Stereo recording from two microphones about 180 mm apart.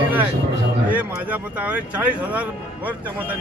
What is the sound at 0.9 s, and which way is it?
Speech, 10° right (ahead or behind).